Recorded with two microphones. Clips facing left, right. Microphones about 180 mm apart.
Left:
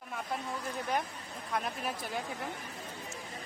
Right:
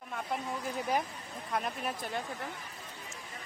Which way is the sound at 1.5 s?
Centre (ahead or behind).